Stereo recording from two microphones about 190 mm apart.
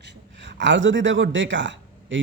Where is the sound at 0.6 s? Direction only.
75° right (ahead or behind).